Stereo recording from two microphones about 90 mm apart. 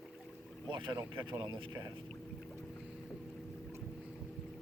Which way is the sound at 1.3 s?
50° right (ahead or behind).